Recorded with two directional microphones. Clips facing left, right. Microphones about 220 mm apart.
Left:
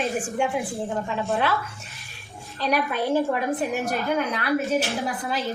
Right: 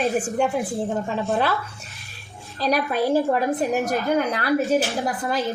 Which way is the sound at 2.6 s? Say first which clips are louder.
Right 3 dB; 35° right (ahead or behind).